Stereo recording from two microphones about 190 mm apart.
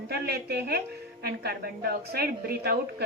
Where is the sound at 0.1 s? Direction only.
55° right (ahead or behind).